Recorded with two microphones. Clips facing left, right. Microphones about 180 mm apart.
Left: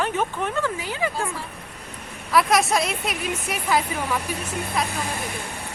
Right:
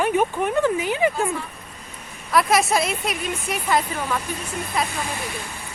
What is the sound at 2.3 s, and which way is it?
A woman's voice, centre (ahead or behind).